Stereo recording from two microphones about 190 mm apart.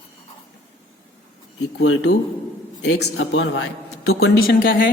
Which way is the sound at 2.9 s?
75° left (ahead or behind).